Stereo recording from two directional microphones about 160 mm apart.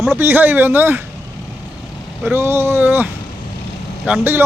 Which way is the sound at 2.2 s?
15° right (ahead or behind).